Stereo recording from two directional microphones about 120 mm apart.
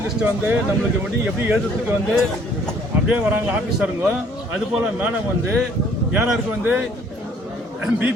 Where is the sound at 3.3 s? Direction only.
15° right (ahead or behind).